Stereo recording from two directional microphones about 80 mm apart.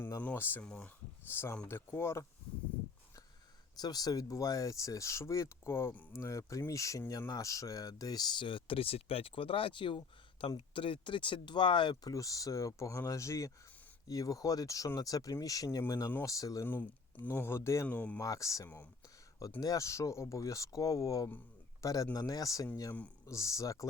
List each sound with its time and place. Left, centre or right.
0.3 s speech: left
0.6 s speech: centre
1.3 s speech: left
3.8 s speech: left
12.1 s speech: left
16.6 s speech: left
17.8 s speech: centre
18.2 s speech: left
22.9 s speech: centre
23.2 s speech: left